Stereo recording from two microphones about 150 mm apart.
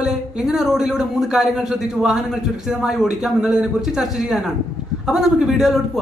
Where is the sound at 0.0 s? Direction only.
5° right (ahead or behind).